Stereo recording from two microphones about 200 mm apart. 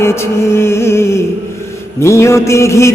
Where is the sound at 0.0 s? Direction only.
15° left (ahead or behind).